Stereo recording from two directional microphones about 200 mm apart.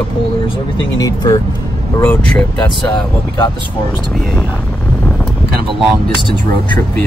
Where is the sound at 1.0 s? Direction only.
20° left (ahead or behind).